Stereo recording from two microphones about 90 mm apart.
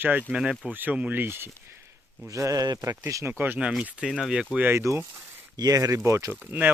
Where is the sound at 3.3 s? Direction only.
25° right (ahead or behind).